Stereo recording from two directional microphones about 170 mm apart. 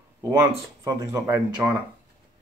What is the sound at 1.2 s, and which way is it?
Speech, 5° right (ahead or behind).